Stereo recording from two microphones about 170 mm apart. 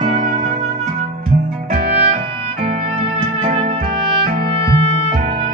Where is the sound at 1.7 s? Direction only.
65° right (ahead or behind).